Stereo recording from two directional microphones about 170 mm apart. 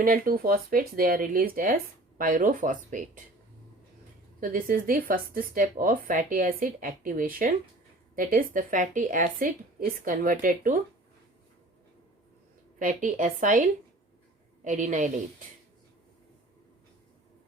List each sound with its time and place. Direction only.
0.0 s speech: 60° right (ahead or behind)
4.4 s speech: 55° right (ahead or behind)
12.8 s speech: 50° right (ahead or behind)